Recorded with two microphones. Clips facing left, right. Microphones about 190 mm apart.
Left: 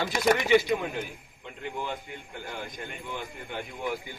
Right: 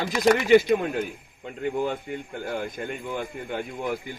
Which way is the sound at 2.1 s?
45° right (ahead or behind).